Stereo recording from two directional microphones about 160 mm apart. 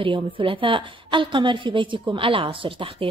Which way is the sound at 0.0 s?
35° right (ahead or behind).